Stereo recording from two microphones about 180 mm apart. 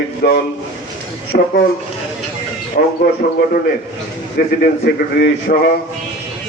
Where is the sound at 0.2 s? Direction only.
60° left (ahead or behind).